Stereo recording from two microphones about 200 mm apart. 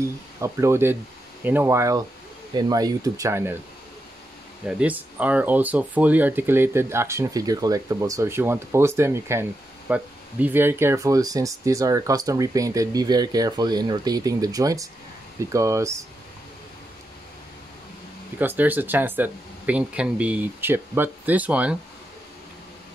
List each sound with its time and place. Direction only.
0.4 s speech: 15° right (ahead or behind)
4.6 s speech: 5° right (ahead or behind)
18.4 s speech: 10° right (ahead or behind)